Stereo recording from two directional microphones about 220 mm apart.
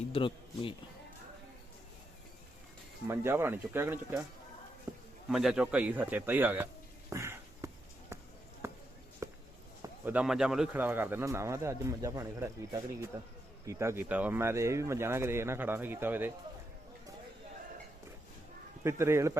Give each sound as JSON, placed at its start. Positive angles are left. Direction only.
{"t": 0.1, "sound": "speech", "side_deg": 25}
{"t": 3.1, "sound": "speech", "side_deg": -10}
{"t": 4.9, "sound": "a sound", "side_deg": -10}
{"t": 5.3, "sound": "speech", "side_deg": 0}
{"t": 7.1, "sound": "a sound", "side_deg": -15}
{"t": 9.2, "sound": "walk", "side_deg": -15}
{"t": 9.8, "sound": "speech", "side_deg": -10}
{"t": 18.8, "sound": "speech", "side_deg": -10}